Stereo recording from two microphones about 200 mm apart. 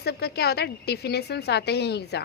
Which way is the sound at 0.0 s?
55° left (ahead or behind).